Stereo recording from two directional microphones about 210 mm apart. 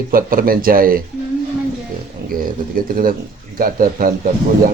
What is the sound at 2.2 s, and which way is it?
Speech, 45° right (ahead or behind).